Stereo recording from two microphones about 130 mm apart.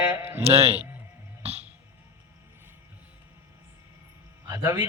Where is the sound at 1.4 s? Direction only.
50° right (ahead or behind).